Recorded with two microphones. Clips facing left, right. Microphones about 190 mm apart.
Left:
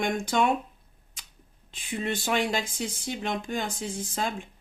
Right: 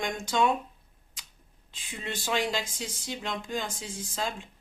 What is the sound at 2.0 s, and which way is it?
Speech, 60° left (ahead or behind).